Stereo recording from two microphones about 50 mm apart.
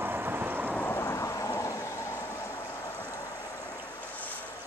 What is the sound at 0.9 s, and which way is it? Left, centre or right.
Thunder, left.